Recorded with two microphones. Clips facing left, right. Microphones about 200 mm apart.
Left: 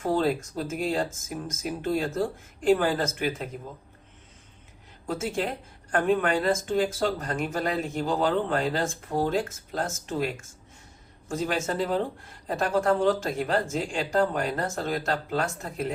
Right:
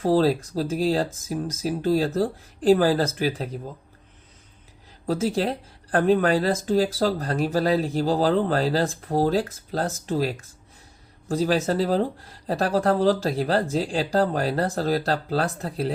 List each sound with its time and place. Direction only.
0.0 s speech: 35° right (ahead or behind)
5.0 s speech: 35° right (ahead or behind)